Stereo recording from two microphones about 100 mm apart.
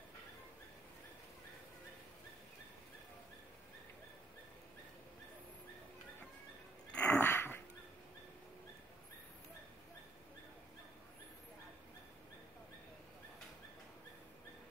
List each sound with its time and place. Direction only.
6.9 s sneeze: 15° left (ahead or behind)